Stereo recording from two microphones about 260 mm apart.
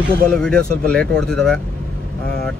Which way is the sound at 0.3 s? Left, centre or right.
Centre.